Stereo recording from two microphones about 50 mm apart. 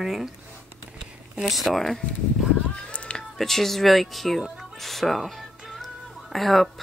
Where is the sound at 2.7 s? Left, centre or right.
Left.